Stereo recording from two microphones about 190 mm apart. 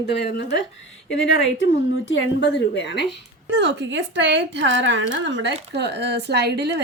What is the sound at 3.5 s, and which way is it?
A woman's voice, 70° right (ahead or behind).